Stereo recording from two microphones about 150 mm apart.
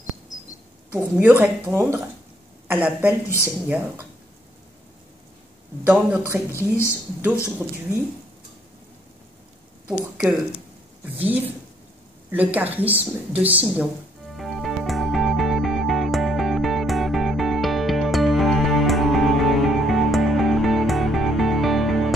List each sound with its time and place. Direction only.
0.9 s speech: 10° right (ahead or behind)
5.9 s speech: 10° right (ahead or behind)
7.4 s speech: 10° right (ahead or behind)
9.8 s speech: 5° right (ahead or behind)
14.3 s music: centre (ahead or behind)